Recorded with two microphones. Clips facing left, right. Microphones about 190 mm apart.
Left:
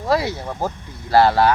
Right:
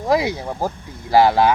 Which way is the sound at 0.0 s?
15° right (ahead or behind).